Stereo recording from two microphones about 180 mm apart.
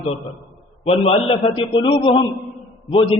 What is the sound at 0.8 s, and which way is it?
A man's voice, 30° left (ahead or behind).